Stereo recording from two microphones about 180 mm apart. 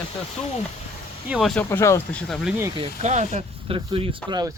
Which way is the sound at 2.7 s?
35° right (ahead or behind).